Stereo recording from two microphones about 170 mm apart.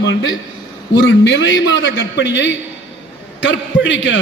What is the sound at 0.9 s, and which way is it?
A man's voice, 90° left.